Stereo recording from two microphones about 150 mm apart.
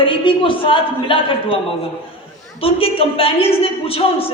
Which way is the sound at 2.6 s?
40° left (ahead or behind).